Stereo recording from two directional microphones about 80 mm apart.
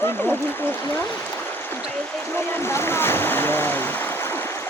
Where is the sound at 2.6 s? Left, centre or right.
Left.